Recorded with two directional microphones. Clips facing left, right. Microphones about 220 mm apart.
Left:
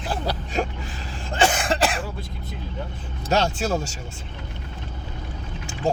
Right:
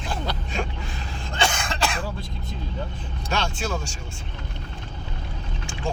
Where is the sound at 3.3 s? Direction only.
40° left (ahead or behind).